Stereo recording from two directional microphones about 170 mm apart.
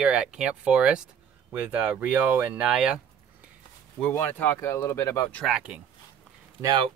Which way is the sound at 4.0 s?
10° left (ahead or behind).